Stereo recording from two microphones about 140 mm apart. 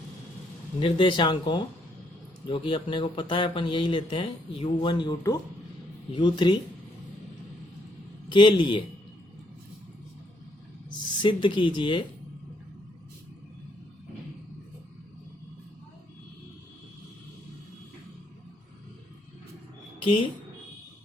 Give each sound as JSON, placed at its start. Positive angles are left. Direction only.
{"t": 0.8, "sound": "speech", "side_deg": 40}
{"t": 8.3, "sound": "speech", "side_deg": 35}
{"t": 11.2, "sound": "speech", "side_deg": 35}
{"t": 20.0, "sound": "speech", "side_deg": 40}